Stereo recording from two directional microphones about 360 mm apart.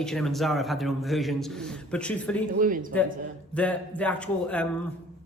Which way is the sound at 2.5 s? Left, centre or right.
Right.